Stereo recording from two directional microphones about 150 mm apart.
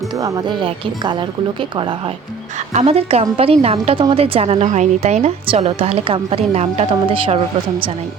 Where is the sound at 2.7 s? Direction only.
45° right (ahead or behind).